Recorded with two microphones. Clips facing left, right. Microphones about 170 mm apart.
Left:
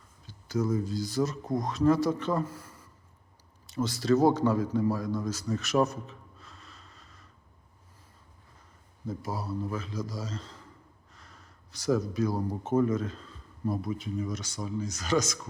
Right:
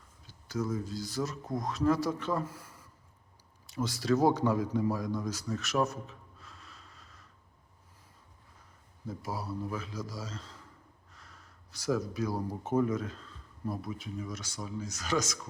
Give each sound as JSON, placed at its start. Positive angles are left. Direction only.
{"t": 0.3, "sound": "a sound", "side_deg": 0}
{"t": 0.7, "sound": "speech", "side_deg": 0}
{"t": 3.7, "sound": "a man's voice", "side_deg": -10}
{"t": 5.5, "sound": "gasp", "side_deg": 0}
{"t": 9.0, "sound": "a man's voice", "side_deg": -10}
{"t": 11.1, "sound": "a sound", "side_deg": -5}
{"t": 12.7, "sound": "speech", "side_deg": -5}